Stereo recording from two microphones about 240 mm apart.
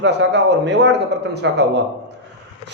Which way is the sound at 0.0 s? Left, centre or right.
Right.